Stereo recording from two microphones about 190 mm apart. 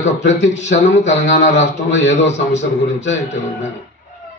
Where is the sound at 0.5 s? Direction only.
40° left (ahead or behind).